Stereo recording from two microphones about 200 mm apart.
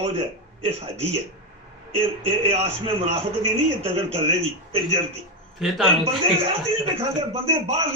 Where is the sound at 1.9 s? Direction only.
30° right (ahead or behind).